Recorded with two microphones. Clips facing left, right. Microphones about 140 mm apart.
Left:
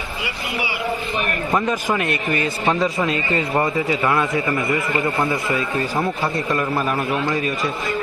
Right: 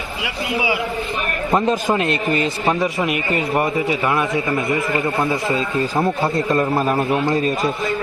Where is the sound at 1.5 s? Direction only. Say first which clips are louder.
Right 4 dB; 25° right (ahead or behind).